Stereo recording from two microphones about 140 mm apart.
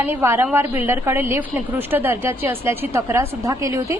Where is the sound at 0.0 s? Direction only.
15° right (ahead or behind).